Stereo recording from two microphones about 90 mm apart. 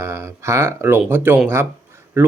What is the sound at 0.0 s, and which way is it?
Speech, 30° right (ahead or behind).